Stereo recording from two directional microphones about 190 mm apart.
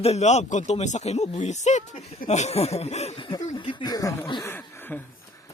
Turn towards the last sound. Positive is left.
turn(degrees=10)  # may be behind; listen again after turning